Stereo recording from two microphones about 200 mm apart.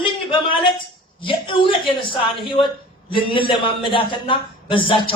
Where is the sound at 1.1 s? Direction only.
25° left (ahead or behind).